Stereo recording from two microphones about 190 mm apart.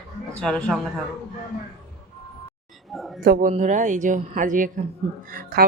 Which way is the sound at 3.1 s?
50° right (ahead or behind).